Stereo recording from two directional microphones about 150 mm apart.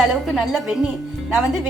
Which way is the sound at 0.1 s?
5° right (ahead or behind).